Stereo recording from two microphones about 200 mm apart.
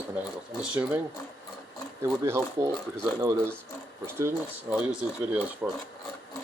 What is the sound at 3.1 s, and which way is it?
Speech, 15° right (ahead or behind).